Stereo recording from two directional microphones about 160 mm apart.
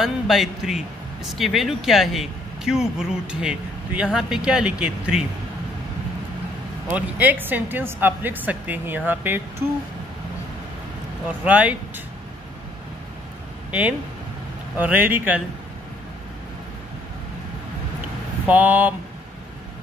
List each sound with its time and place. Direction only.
0.0 s a man's voice: centre (ahead or behind)
6.9 s speech: 10° right (ahead or behind)
11.2 s speech: 10° right (ahead or behind)
13.7 s speech: 10° right (ahead or behind)
18.5 s speech: 10° right (ahead or behind)